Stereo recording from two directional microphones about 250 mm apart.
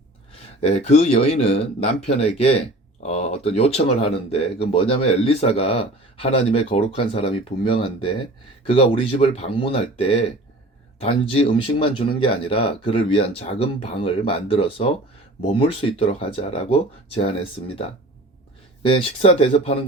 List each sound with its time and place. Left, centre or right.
0.6 s speech: left